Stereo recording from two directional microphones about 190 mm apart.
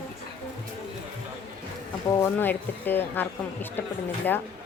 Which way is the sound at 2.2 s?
10° left (ahead or behind).